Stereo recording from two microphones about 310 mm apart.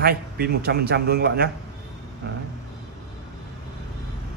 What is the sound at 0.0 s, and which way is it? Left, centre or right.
Speech, right.